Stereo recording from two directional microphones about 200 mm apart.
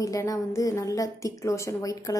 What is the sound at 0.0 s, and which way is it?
Speech, 15° left (ahead or behind).